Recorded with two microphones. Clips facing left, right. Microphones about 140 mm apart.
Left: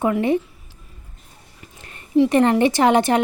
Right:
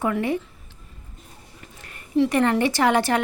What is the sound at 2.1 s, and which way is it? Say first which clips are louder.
Speech: left 4 dB; 20° left (ahead or behind).